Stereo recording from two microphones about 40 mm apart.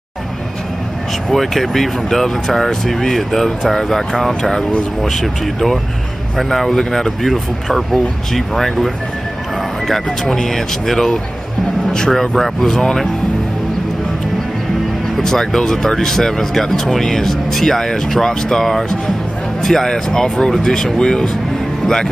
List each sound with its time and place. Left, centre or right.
1.3 s speech: centre
15.1 s speech: centre